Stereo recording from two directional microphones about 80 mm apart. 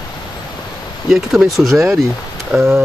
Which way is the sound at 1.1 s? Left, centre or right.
Centre.